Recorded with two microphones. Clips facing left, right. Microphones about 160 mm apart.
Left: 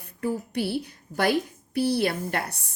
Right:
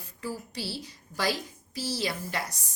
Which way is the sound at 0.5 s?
60° left (ahead or behind).